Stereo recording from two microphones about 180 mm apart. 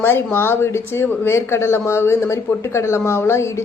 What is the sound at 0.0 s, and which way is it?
Speech, 10° left (ahead or behind).